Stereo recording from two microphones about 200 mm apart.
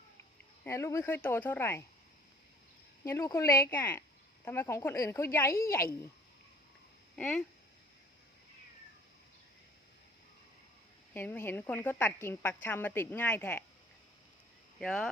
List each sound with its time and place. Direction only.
0.6 s speech: 15° left (ahead or behind)
3.0 s speech: 15° left (ahead or behind)
7.2 s speech: 5° left (ahead or behind)
11.1 s speech: 10° left (ahead or behind)
14.8 s speech: centre (ahead or behind)